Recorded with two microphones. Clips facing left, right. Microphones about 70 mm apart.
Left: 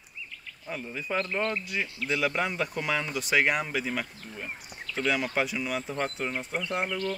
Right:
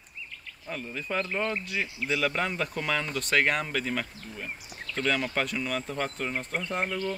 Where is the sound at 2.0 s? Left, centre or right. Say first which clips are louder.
Even; centre.